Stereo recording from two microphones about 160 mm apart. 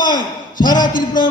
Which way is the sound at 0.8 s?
55° left (ahead or behind).